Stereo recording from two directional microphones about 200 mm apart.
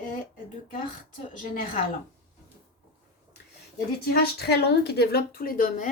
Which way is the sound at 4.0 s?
55° left (ahead or behind).